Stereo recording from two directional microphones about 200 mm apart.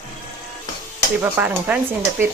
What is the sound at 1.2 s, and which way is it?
Speech, 10° right (ahead or behind).